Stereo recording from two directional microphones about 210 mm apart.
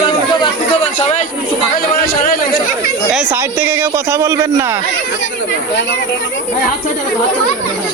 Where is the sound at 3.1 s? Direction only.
5° right (ahead or behind).